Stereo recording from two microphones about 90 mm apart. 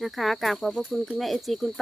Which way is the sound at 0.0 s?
Centre (ahead or behind).